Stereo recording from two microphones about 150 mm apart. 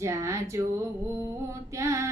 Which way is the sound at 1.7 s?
20° right (ahead or behind).